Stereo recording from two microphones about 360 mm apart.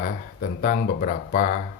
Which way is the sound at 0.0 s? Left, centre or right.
Left.